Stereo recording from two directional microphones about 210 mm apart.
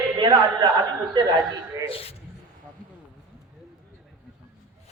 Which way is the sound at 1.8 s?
25° left (ahead or behind).